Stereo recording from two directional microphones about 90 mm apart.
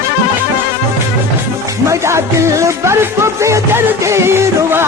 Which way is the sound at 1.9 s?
30° right (ahead or behind).